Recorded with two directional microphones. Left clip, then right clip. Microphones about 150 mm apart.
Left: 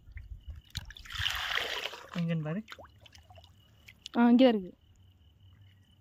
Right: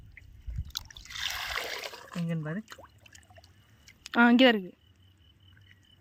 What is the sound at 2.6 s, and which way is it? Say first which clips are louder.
Speech: even; 15° right (ahead or behind).